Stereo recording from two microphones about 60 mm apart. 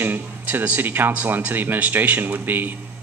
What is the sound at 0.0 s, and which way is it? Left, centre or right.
Speech, right.